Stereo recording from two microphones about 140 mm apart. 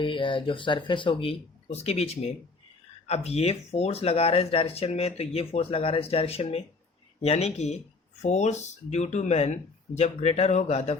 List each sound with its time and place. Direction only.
0.0 s speech: 35° left (ahead or behind)